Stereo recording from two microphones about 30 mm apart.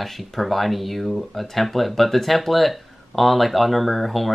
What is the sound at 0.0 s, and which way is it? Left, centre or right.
Speech, centre.